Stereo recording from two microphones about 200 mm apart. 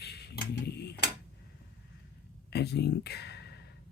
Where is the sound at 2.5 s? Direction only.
55° left (ahead or behind).